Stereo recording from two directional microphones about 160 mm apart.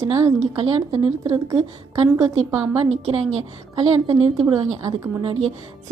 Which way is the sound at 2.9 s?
45° right (ahead or behind).